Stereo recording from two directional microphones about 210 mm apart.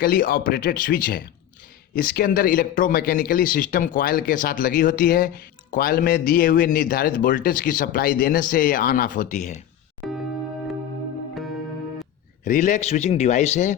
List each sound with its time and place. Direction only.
0.0 s a man's voice: 45° left (ahead or behind)
10.0 s music: centre (ahead or behind)
12.5 s a man's voice: 40° left (ahead or behind)